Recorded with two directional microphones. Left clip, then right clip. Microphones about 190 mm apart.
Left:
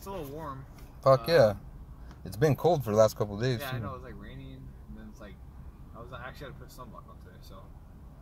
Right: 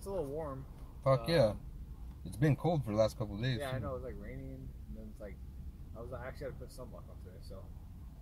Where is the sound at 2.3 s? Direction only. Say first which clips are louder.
Left 9 dB; 40° left (ahead or behind).